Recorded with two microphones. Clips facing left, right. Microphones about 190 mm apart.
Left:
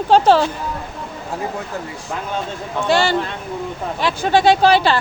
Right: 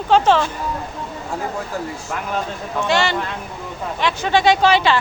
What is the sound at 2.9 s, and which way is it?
Speech, 35° left (ahead or behind).